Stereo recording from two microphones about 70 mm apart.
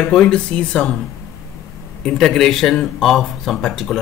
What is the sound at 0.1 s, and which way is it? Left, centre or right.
Speech, centre.